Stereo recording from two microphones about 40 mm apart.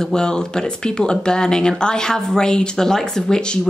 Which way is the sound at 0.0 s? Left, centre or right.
Centre.